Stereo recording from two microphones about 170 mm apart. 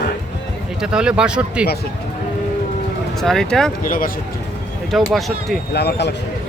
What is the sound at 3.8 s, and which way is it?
Speech, 55° left (ahead or behind).